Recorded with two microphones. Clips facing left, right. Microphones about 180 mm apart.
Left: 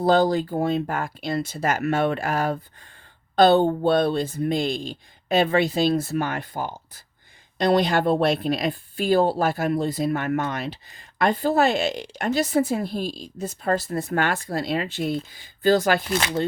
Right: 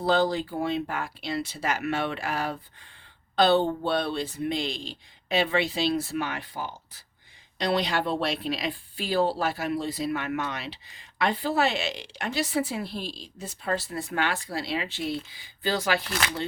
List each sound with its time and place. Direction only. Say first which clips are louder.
0.0 s speech: left 5 dB; 45° left (ahead or behind)
16.0 s speech: left 6 dB; 25° left (ahead or behind)